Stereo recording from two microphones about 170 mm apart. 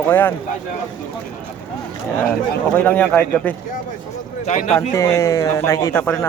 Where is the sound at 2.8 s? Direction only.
10° left (ahead or behind).